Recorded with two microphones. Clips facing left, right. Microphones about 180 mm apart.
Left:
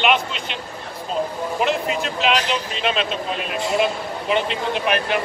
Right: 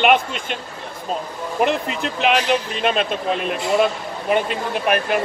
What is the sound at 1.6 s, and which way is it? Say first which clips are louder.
Speech: right 2 dB; 55° right (ahead or behind).